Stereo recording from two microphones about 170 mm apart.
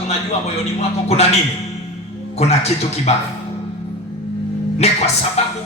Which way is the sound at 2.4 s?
40° left (ahead or behind).